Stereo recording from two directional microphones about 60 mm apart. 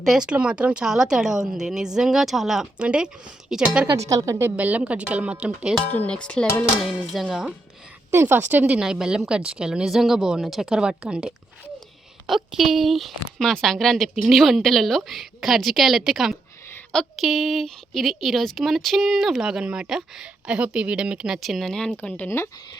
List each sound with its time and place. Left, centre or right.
0.0 s speech: centre
0.3 s a woman's voice: centre
2.7 s a woman's voice: centre
3.9 s a woman's voice: right
4.5 s speech: right
5.8 s speech: left
6.1 s speech: centre
6.8 s a woman's voice: centre
8.1 s a woman's voice: right
8.6 s a woman's voice: centre